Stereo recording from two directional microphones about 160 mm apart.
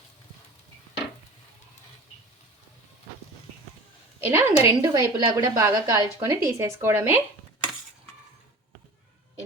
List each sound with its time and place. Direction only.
4.2 s a woman's voice: 15° right (ahead or behind)